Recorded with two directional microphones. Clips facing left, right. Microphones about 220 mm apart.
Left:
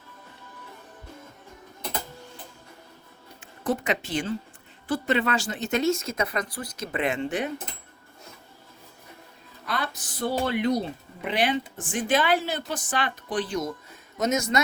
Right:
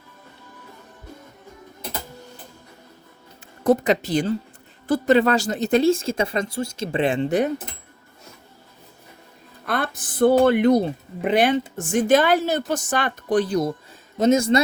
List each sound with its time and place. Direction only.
3.6 s speech: 40° right (ahead or behind)
9.6 s speech: 55° right (ahead or behind); by 14.6 s 30° right (ahead or behind)